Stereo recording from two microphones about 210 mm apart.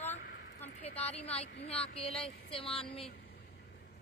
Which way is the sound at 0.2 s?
55° left (ahead or behind).